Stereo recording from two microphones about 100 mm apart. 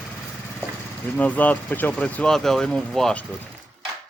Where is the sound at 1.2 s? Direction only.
15° left (ahead or behind).